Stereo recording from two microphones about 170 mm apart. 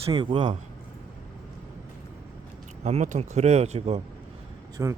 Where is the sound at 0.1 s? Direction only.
30° right (ahead or behind).